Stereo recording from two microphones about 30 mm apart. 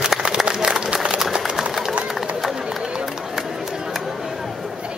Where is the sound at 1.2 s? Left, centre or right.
Centre.